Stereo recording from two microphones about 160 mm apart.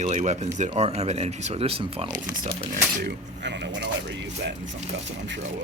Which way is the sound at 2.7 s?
85° right.